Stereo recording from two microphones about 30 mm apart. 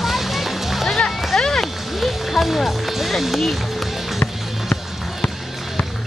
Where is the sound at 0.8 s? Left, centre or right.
Centre.